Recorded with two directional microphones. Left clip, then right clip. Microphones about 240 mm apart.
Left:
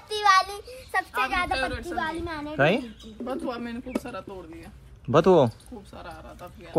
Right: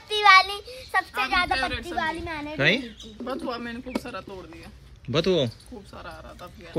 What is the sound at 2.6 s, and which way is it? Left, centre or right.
Speech, centre.